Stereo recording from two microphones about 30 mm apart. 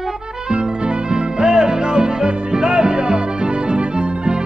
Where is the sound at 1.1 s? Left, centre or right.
Right.